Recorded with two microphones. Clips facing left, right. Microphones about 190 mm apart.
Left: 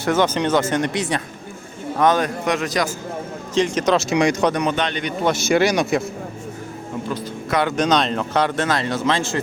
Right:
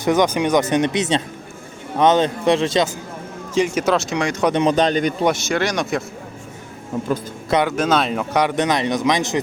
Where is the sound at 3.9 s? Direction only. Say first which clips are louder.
Left 3 dB; 10° left (ahead or behind).